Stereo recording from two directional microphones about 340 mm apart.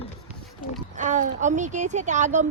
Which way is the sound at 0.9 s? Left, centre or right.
Right.